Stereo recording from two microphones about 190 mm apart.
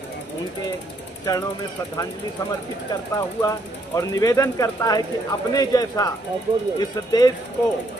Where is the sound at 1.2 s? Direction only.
20° left (ahead or behind).